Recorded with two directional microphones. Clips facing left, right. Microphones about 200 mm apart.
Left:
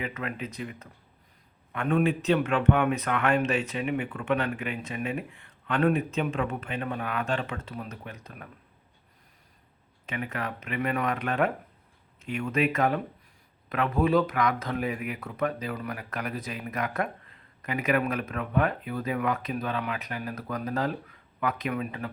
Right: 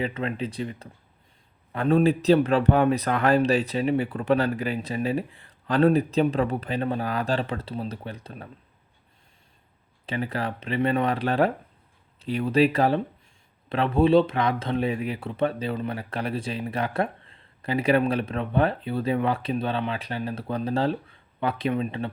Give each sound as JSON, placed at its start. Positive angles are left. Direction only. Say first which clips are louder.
{"t": 0.0, "sound": "speech", "louder": "right 6 dB", "side_deg": -30}
{"t": 10.1, "sound": "speech", "louder": "right 5 dB", "side_deg": -30}